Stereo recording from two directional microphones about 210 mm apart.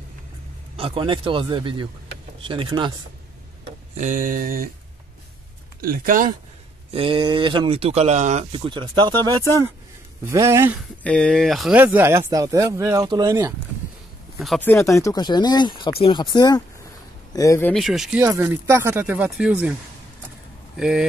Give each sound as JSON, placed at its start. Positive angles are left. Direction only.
{"t": 0.7, "sound": "speech", "side_deg": -25}
{"t": 3.9, "sound": "mantra", "side_deg": -35}
{"t": 5.8, "sound": "mantra", "side_deg": -40}
{"t": 6.9, "sound": "speech", "side_deg": -25}
{"t": 11.0, "sound": "speech", "side_deg": 5}
{"t": 14.4, "sound": "speech", "side_deg": 5}
{"t": 18.2, "sound": "speech", "side_deg": -10}
{"t": 20.7, "sound": "speech", "side_deg": -5}